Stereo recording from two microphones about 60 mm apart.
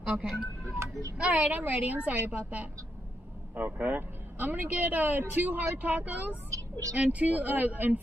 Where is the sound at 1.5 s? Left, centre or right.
Right.